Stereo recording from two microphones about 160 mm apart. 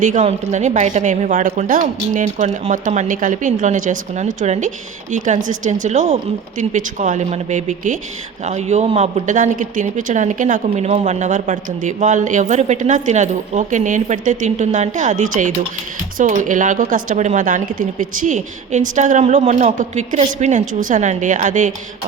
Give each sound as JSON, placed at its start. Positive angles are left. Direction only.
{"t": 0.0, "sound": "a man's voice", "side_deg": -50}